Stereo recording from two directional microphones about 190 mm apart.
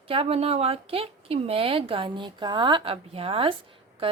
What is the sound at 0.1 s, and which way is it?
A woman's voice, 30° right (ahead or behind).